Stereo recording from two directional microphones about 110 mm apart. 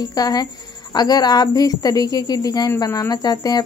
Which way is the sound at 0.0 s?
35° left (ahead or behind).